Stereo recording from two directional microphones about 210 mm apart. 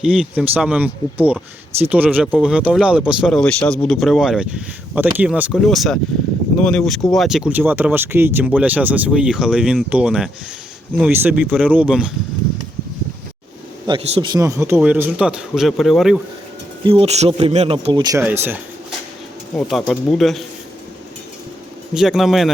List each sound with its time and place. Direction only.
0.0 s a man's voice: 5° right (ahead or behind)
13.8 s a man's voice: 25° right (ahead or behind); by 16.2 s centre (ahead or behind)
16.8 s speech: 25° right (ahead or behind); by 18.9 s 10° right (ahead or behind)
19.5 s speech: 5° left (ahead or behind)
21.9 s speech: centre (ahead or behind)